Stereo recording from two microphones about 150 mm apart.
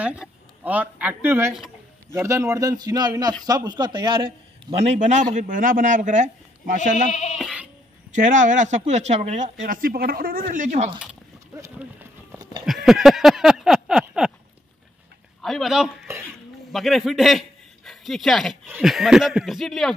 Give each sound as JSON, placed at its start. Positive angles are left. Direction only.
{"t": 0.0, "sound": "a man's voice", "side_deg": -10}
{"t": 4.8, "sound": "speech", "side_deg": -55}
{"t": 7.1, "sound": "music", "side_deg": 45}
{"t": 7.3, "sound": "sheep", "side_deg": -5}
{"t": 8.1, "sound": "speech", "side_deg": -55}
{"t": 10.5, "sound": "speech", "side_deg": -55}
{"t": 12.6, "sound": "a sound", "side_deg": 0}
{"t": 15.4, "sound": "a man's voice", "side_deg": 0}